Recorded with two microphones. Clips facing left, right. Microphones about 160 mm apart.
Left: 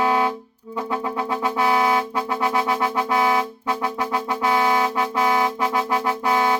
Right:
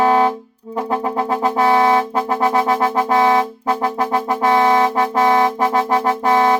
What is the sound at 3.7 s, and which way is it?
Music, 45° right (ahead or behind).